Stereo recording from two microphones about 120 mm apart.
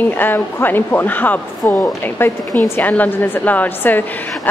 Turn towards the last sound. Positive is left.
turn(degrees=15)  # may be behind; listen again after turning